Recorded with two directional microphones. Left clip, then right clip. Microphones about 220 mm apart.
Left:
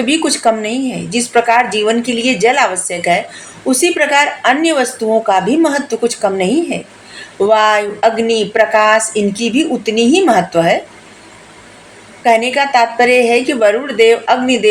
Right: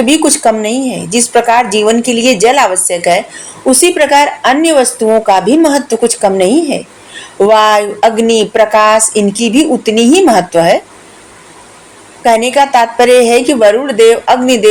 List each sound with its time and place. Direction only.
0.0 s speech: 30° right (ahead or behind)
12.2 s a woman's voice: 30° right (ahead or behind)